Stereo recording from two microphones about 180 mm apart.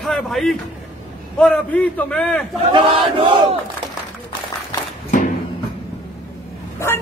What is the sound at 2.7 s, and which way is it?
Battle cry, 30° right (ahead or behind).